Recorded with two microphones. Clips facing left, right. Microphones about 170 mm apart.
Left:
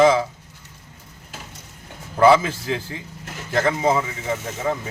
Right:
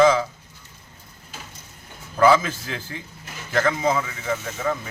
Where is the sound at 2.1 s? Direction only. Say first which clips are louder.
Left 2 dB; 25° left (ahead or behind).